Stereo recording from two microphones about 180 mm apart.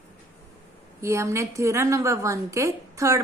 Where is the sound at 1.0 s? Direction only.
15° right (ahead or behind).